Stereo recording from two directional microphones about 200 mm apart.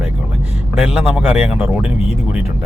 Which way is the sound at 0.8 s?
5° right (ahead or behind).